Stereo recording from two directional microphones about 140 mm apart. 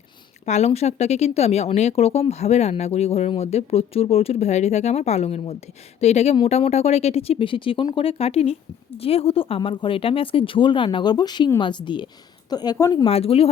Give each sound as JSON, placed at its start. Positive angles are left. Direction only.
{"t": 0.4, "sound": "speech", "side_deg": 50}
{"t": 13.1, "sound": "speech", "side_deg": 45}